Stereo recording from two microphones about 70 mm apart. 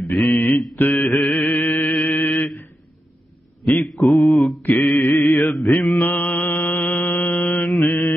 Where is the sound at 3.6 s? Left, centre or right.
Centre.